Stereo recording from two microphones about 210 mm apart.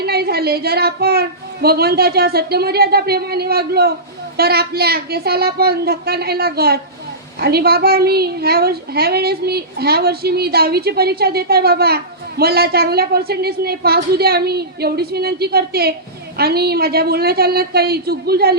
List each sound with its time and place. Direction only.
0.0 s a woman's voice: 50° right (ahead or behind)